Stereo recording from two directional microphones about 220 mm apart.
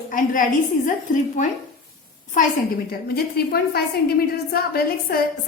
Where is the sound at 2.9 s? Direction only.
45° left (ahead or behind).